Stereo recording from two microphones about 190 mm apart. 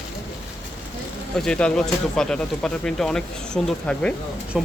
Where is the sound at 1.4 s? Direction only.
5° left (ahead or behind).